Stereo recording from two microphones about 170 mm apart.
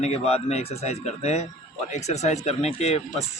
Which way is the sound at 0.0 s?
40° left (ahead or behind).